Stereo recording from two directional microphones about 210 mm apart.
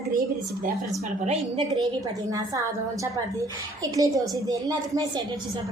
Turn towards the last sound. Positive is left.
turn(degrees=-15)  # may be behind; listen again after turning